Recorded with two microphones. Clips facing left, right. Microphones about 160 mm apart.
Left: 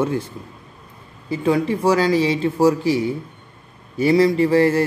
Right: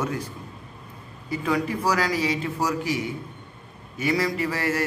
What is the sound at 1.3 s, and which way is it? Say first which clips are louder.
A man's voice: left 6 dB; 30° left (ahead or behind).